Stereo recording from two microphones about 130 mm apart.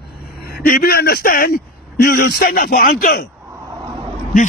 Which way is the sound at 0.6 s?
90° left.